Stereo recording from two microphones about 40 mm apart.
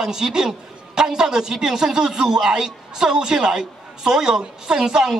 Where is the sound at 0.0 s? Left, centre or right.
Centre.